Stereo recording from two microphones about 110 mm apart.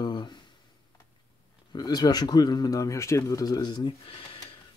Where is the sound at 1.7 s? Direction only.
40° left (ahead or behind).